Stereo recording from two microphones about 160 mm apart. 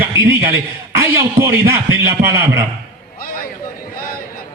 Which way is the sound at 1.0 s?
20° right (ahead or behind).